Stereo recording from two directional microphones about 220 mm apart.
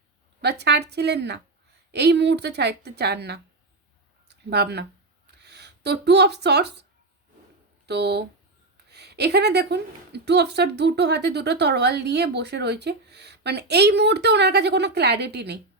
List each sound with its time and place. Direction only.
0.4 s a woman's voice: 50° right (ahead or behind)
4.3 s a sound: 45° right (ahead or behind)
7.9 s a woman's voice: 50° right (ahead or behind)